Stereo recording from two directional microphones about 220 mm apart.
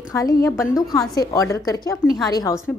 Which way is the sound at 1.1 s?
15° left (ahead or behind).